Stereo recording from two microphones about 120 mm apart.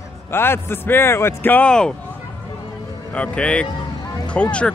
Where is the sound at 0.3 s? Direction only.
20° left (ahead or behind).